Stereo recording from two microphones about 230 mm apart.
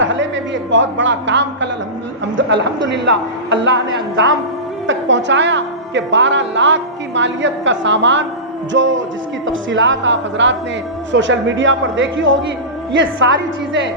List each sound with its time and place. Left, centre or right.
0.0 s a sound: right
0.7 s a woman's voice: right
4.9 s a woman's voice: right